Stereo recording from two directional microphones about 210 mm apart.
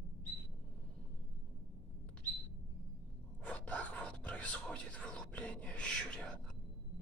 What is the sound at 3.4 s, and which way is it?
Whispering, 5° left (ahead or behind).